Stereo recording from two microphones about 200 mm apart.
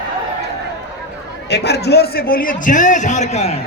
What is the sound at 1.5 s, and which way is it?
A man's voice, 55° left (ahead or behind).